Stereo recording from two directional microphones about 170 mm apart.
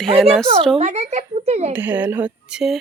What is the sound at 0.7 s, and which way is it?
Speech, 40° right (ahead or behind).